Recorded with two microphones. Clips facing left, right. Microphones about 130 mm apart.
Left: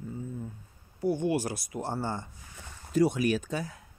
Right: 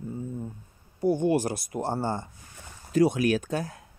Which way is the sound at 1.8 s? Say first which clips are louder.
Right 4 dB; 30° right (ahead or behind).